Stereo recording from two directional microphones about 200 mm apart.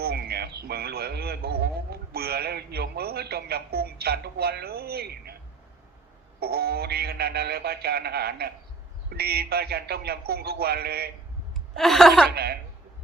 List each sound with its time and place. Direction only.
0.0 s a man's voice: 50° right (ahead or behind)
6.4 s a man's voice: 50° right (ahead or behind)
11.8 s speech: centre (ahead or behind)
12.3 s a man's voice: 50° right (ahead or behind)